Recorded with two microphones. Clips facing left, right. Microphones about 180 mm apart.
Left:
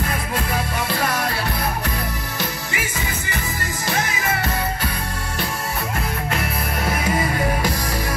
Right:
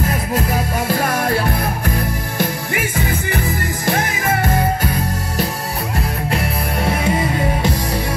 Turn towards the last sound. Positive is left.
turn(degrees=-30)  # may be behind; listen again after turning